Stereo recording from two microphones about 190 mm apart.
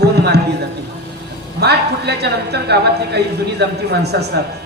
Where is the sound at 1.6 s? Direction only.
60° right (ahead or behind).